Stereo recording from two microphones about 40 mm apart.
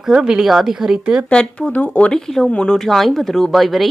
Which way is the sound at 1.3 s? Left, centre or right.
Left.